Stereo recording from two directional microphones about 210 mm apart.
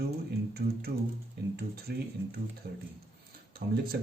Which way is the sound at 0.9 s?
50° right (ahead or behind).